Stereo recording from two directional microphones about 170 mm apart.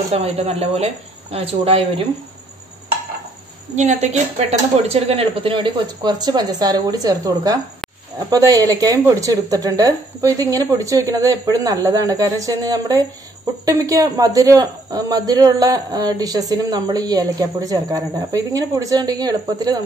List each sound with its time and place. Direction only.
0.1 s a woman's voice: 35° right (ahead or behind)
3.7 s a woman's voice: 40° right (ahead or behind); by 19.8 s 25° right (ahead or behind)